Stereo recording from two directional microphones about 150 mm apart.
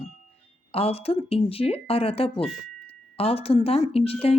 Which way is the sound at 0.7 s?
40° left (ahead or behind).